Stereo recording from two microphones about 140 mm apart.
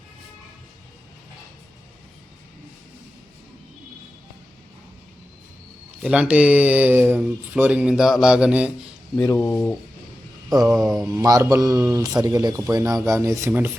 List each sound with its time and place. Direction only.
6.0 s speech: 5° right (ahead or behind)
9.1 s speech: 10° left (ahead or behind)
10.6 s mantra: centre (ahead or behind)
11.0 s speech: 20° right (ahead or behind)